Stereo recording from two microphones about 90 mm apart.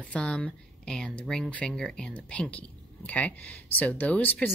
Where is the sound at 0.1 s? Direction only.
10° left (ahead or behind).